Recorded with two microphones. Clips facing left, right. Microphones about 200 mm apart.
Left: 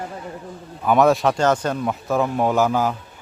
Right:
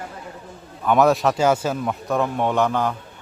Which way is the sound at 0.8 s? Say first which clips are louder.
Left 1 dB; centre (ahead or behind).